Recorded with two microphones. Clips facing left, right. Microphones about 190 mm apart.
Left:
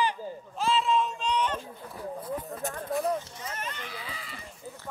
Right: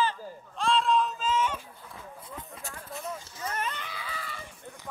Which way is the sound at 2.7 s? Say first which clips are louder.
Left 10 dB; 35° left (ahead or behind).